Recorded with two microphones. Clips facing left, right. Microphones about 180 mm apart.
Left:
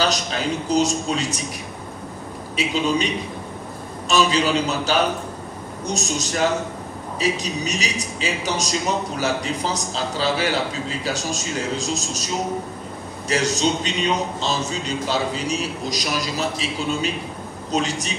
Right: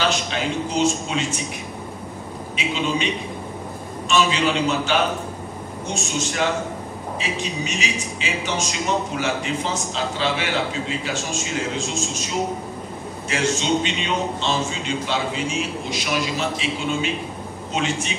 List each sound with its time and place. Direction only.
0.0 s a man's voice: 40° left (ahead or behind)
2.5 s a man's voice: 40° left (ahead or behind)
4.1 s a man's voice: 40° left (ahead or behind)
13.3 s a man's voice: 40° left (ahead or behind)